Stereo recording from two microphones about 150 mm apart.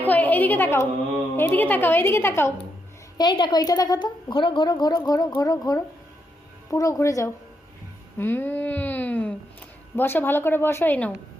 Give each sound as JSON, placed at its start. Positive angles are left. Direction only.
{"t": 0.0, "sound": "a woman's voice", "side_deg": 10}
{"t": 3.2, "sound": "a woman's voice", "side_deg": 30}